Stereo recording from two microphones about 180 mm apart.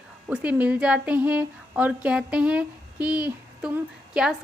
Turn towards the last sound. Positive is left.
turn(degrees=-5)  # may be behind; listen again after turning